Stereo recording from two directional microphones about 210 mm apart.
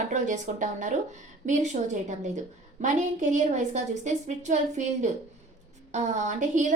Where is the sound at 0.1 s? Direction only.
35° right (ahead or behind).